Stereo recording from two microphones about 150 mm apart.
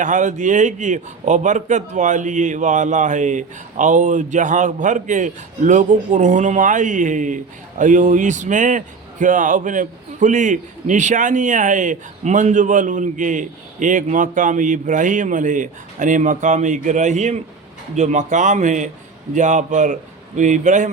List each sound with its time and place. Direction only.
0.0 s a man's voice: 55° right (ahead or behind)